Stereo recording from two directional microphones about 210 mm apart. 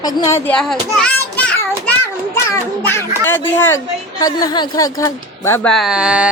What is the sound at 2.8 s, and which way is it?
Speech, 10° left (ahead or behind).